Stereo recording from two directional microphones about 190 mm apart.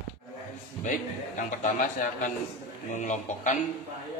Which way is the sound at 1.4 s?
40° left (ahead or behind).